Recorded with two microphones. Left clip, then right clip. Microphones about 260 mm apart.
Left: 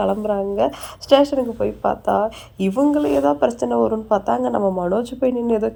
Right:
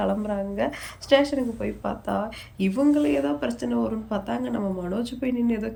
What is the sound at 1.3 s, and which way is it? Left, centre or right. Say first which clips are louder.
A woman's voice: left 8 dB; left.